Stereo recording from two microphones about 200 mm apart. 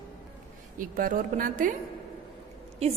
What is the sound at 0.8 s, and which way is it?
Speech, 45° right (ahead or behind).